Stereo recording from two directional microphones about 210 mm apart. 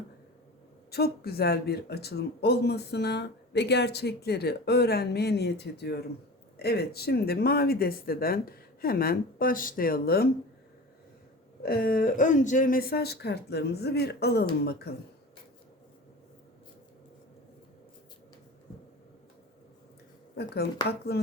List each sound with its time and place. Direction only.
0.9 s speech: 50° left (ahead or behind)
11.6 s speech: 45° left (ahead or behind)
20.3 s speech: 50° left (ahead or behind)